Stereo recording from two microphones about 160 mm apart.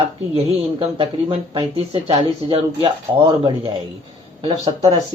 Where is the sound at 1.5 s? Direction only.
35° right (ahead or behind).